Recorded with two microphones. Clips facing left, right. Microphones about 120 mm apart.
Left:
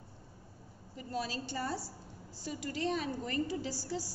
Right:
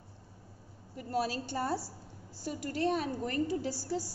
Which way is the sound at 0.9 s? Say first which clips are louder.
Right 5 dB; 55° right (ahead or behind).